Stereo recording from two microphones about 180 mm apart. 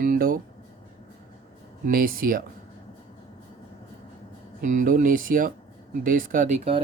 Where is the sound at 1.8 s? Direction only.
50° right (ahead or behind).